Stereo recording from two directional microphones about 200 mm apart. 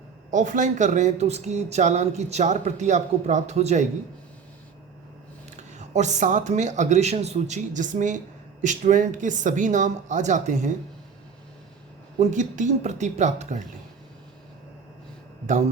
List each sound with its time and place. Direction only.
0.3 s speech: 40° right (ahead or behind)
5.5 s speech: 35° right (ahead or behind)
12.2 s speech: 35° right (ahead or behind)